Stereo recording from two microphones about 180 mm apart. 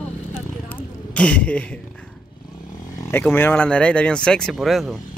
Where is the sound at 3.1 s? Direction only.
10° left (ahead or behind).